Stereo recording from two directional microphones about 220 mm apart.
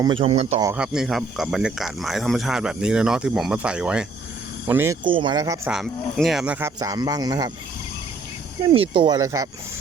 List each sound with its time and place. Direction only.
0.0 s speech: 25° right (ahead or behind)
0.6 s speech: 5° right (ahead or behind)
5.0 s speech: 20° right (ahead or behind)
5.6 s speech: centre (ahead or behind); by 7.5 s 20° right (ahead or behind)
8.7 s speech: 25° right (ahead or behind)